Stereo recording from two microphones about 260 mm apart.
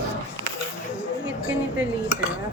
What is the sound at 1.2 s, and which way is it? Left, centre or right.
Dishes, centre.